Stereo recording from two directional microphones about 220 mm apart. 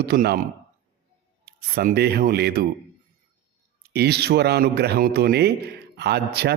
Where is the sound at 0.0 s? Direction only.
45° right (ahead or behind).